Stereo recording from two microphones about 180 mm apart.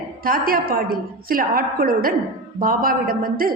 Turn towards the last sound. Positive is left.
turn(degrees=-55)  # may be behind; listen again after turning